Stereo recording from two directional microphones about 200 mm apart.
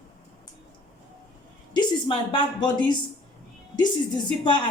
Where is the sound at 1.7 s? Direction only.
25° left (ahead or behind).